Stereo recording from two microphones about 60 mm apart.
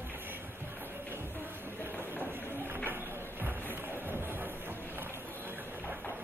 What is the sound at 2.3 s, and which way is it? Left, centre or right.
Music, right.